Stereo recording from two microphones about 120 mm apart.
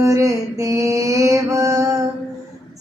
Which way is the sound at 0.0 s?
25° right (ahead or behind).